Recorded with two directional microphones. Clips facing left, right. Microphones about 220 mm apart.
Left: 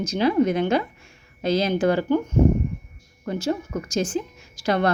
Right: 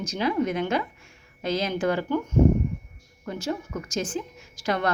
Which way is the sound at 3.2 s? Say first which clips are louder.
Left 5 dB; 30° left (ahead or behind).